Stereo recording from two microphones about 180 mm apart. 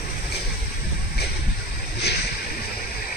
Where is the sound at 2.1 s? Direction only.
65° left (ahead or behind).